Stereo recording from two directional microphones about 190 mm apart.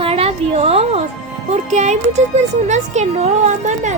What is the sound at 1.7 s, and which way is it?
Speech, 40° right (ahead or behind).